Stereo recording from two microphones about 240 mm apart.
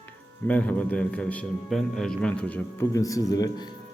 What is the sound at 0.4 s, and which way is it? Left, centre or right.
A man's voice, centre.